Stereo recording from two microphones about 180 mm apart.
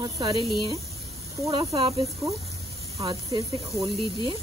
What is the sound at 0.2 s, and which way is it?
Speech, 25° right (ahead or behind).